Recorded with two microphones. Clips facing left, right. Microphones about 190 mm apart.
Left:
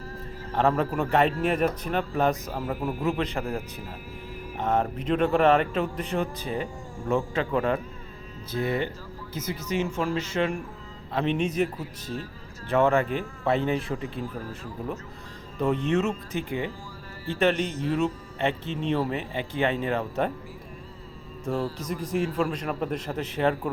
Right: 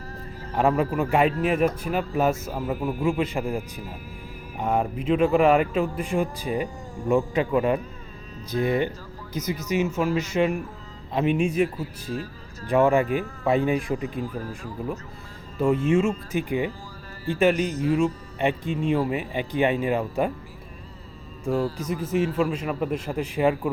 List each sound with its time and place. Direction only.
0.7 s a man's voice: centre (ahead or behind)
15.5 s speech: 5° right (ahead or behind)
21.4 s speech: 10° right (ahead or behind)